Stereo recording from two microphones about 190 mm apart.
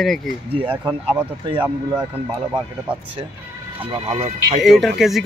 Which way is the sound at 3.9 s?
30° right (ahead or behind).